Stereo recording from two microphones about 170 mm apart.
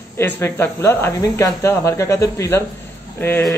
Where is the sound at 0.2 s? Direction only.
15° left (ahead or behind).